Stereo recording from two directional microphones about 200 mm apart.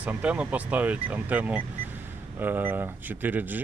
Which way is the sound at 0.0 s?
5° right (ahead or behind).